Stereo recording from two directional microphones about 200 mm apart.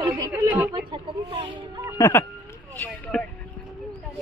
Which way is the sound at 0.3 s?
10° right (ahead or behind).